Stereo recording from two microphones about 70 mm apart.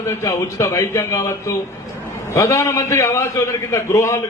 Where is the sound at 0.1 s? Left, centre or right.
Left.